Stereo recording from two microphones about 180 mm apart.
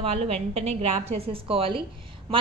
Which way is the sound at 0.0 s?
35° right (ahead or behind).